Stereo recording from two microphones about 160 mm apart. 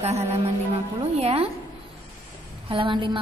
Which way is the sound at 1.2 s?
40° right (ahead or behind).